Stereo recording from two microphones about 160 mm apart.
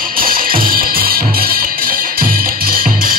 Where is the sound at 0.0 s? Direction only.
65° right (ahead or behind).